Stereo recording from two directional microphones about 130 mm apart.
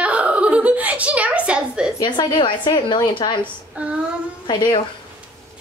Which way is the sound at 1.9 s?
35° left (ahead or behind).